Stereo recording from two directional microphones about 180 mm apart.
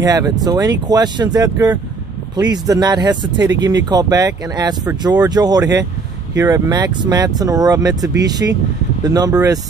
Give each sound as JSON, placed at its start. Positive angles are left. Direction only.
{"t": 0.0, "sound": "speech", "side_deg": -20}